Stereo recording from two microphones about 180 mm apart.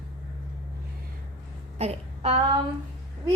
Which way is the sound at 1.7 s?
35° right (ahead or behind).